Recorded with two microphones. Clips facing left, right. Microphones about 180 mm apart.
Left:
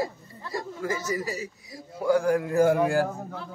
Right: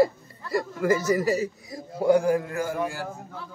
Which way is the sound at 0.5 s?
65° right (ahead or behind).